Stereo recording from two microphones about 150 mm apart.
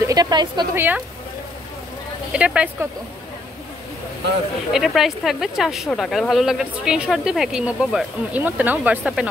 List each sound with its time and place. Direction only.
0.0 s a woman's voice: 25° right (ahead or behind)
0.7 s speech: 10° right (ahead or behind)
2.3 s speech: 5° right (ahead or behind)
4.7 s speech: centre (ahead or behind)